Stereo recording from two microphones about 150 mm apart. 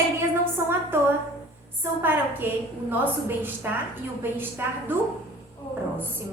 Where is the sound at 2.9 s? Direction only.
15° right (ahead or behind).